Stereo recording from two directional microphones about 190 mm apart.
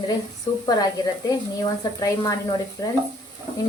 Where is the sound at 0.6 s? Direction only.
20° left (ahead or behind).